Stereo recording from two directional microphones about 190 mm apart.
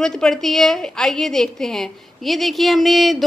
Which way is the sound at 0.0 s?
5° left (ahead or behind).